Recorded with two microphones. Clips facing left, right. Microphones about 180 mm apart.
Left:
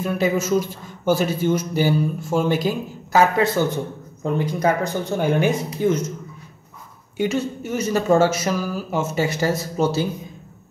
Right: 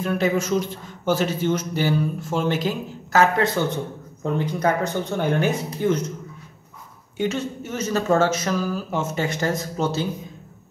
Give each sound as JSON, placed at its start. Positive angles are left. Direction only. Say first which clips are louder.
{"t": 0.0, "sound": "a man's voice", "louder": "left 1 dB", "side_deg": 5}
{"t": 7.2, "sound": "a man's voice", "louder": "left 3 dB", "side_deg": 10}